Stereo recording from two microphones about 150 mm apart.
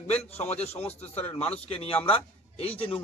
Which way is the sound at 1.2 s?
10° left (ahead or behind).